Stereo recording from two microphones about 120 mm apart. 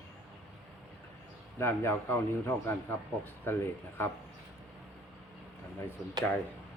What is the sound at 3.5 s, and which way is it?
Speech, 20° left (ahead or behind).